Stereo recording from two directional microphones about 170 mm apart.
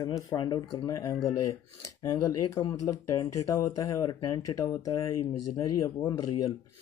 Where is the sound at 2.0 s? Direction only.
20° left (ahead or behind).